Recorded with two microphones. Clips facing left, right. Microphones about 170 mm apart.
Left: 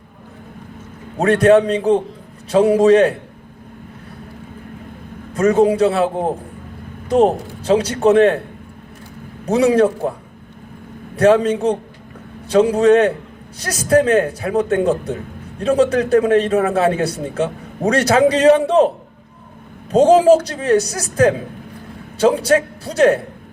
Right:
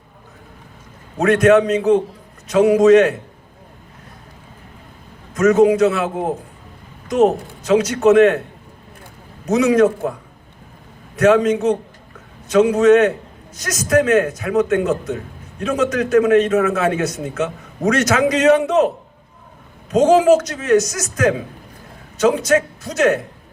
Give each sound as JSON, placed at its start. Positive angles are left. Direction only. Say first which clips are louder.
{"t": 1.2, "sound": "a man's voice", "louder": "left 1 dB", "side_deg": 35}
{"t": 5.3, "sound": "a man's voice", "louder": "right 1 dB", "side_deg": 30}
{"t": 7.6, "sound": "a man's voice", "louder": "even", "side_deg": 35}
{"t": 9.5, "sound": "a man's voice", "louder": "even", "side_deg": 30}
{"t": 11.2, "sound": "a man's voice", "louder": "left 1 dB", "side_deg": 30}
{"t": 19.9, "sound": "a man's voice", "louder": "left 2 dB", "side_deg": 35}